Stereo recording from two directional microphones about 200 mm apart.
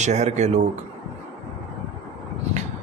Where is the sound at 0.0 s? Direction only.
35° right (ahead or behind).